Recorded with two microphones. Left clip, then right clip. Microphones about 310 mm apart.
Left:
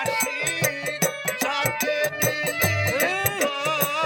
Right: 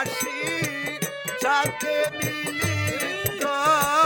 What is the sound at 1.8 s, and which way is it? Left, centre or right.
Music, centre.